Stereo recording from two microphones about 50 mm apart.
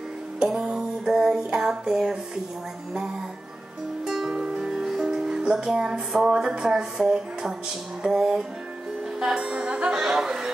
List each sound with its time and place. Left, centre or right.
0.5 s music: centre
4.0 s music: centre
8.0 s speech: centre
9.5 s music: right
9.8 s speech: centre